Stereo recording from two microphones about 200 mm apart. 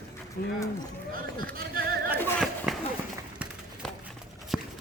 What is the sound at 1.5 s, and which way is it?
Horse, 50° right (ahead or behind).